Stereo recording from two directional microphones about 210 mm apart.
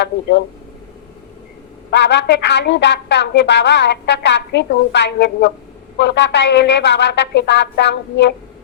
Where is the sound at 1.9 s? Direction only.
55° left (ahead or behind).